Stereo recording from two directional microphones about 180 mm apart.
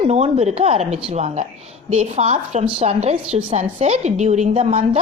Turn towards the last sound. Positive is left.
turn(degrees=-35)  # may be behind; listen again after turning